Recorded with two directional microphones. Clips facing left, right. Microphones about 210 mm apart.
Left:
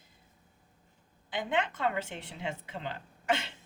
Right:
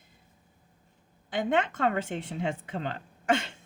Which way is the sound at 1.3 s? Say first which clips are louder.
Right 5 dB; 50° right (ahead or behind).